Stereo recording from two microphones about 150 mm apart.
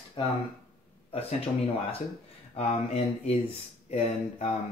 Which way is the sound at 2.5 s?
45° left (ahead or behind).